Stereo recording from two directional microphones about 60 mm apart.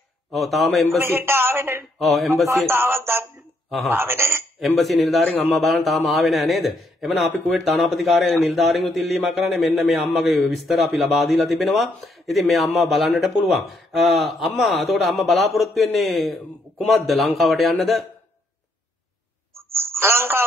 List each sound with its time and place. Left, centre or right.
0.3 s a man's voice: centre
0.9 s a woman's voice: right
2.0 s a man's voice: centre
2.7 s speech: right
4.6 s a man's voice: centre
19.5 s telephone: right